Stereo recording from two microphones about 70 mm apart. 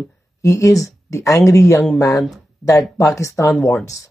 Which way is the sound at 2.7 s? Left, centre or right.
Left.